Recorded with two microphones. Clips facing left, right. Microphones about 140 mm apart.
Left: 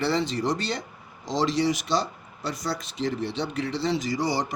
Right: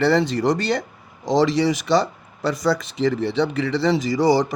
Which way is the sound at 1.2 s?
65° right (ahead or behind).